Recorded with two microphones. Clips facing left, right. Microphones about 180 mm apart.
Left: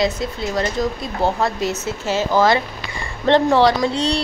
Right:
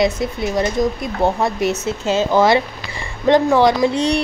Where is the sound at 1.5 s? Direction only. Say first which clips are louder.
Right 3 dB; 20° left (ahead or behind).